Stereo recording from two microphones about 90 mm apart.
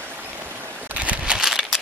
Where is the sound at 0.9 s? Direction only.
15° right (ahead or behind).